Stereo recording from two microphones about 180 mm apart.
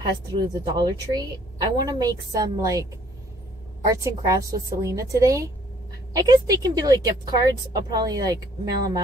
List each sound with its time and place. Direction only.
0.0 s a woman's voice: 25° right (ahead or behind)